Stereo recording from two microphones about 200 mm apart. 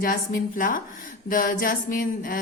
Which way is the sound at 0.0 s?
45° left (ahead or behind).